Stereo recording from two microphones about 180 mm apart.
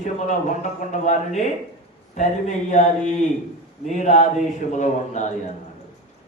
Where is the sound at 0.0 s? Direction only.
40° left (ahead or behind).